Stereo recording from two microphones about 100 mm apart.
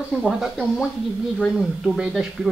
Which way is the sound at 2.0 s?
10° right (ahead or behind).